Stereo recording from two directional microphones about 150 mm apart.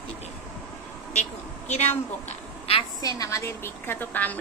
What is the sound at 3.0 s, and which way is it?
A woman's voice, 20° left (ahead or behind).